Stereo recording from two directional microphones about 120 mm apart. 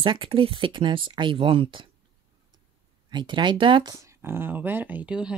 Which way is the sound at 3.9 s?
25° right (ahead or behind).